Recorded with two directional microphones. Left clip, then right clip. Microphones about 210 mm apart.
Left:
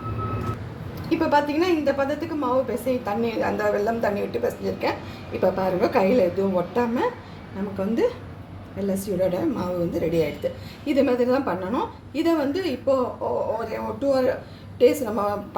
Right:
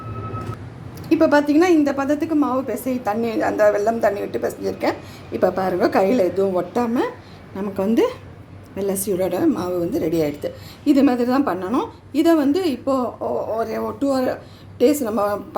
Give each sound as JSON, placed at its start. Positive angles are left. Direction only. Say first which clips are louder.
{"t": 1.1, "sound": "a woman's voice", "louder": "right 5 dB", "side_deg": -55}